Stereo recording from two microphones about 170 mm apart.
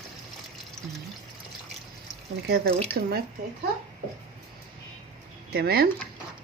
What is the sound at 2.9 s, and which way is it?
Speech, 70° right (ahead or behind).